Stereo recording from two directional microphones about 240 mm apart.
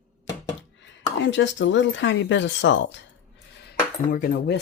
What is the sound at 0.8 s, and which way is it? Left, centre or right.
Speech, left.